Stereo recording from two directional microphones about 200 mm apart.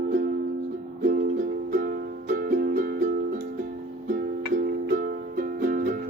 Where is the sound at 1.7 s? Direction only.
40° right (ahead or behind).